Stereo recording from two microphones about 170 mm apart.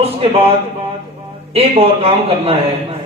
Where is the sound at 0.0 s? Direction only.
35° right (ahead or behind).